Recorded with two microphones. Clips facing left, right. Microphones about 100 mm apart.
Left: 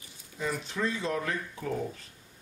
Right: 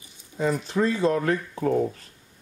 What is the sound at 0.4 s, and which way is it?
Speech, 40° right (ahead or behind).